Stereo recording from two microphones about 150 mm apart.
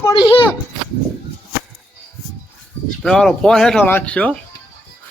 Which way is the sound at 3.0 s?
5° left (ahead or behind).